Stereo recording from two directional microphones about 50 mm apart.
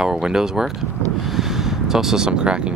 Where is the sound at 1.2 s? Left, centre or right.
Centre.